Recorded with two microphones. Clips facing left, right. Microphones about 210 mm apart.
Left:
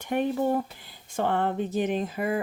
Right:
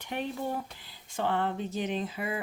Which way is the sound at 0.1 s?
50° left (ahead or behind).